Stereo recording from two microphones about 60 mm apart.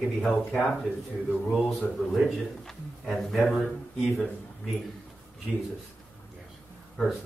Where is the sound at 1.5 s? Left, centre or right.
Centre.